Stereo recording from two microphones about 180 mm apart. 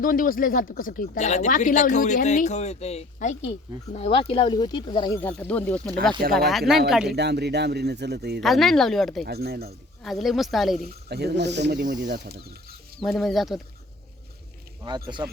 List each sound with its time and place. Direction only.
0.0 s speech: 50° left (ahead or behind); by 5.2 s 20° left (ahead or behind)
5.2 s speech: 10° left (ahead or behind)
7.2 s speech: 70° right (ahead or behind)
8.4 s speech: centre (ahead or behind)
9.2 s speech: 60° right (ahead or behind)
10.0 s speech: centre (ahead or behind)
10.8 s speech: 65° right (ahead or behind)
13.0 s speech: centre (ahead or behind)
14.8 s speech: 25° right (ahead or behind)